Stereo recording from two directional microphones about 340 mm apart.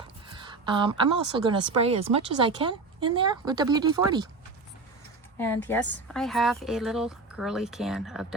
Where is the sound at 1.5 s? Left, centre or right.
Centre.